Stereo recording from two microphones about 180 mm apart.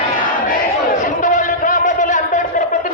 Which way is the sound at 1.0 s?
45° left (ahead or behind).